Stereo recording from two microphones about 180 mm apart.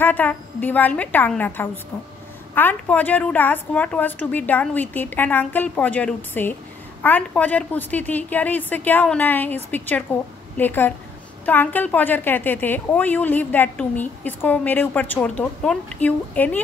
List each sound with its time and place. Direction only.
0.0 s a woman's voice: 10° left (ahead or behind)